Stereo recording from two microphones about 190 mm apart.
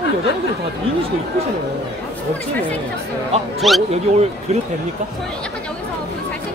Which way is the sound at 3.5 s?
Centre (ahead or behind).